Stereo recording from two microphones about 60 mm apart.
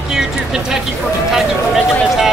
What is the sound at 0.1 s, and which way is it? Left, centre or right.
Vehicle, centre.